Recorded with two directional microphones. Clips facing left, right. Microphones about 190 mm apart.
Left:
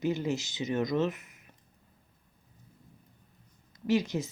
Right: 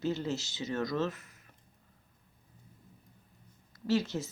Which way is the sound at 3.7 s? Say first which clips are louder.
Left 2 dB; 15° left (ahead or behind).